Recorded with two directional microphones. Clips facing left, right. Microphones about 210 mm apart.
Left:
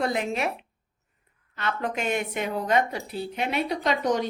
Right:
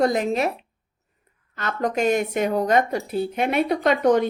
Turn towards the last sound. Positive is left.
turn(degrees=-55)  # may be behind; listen again after turning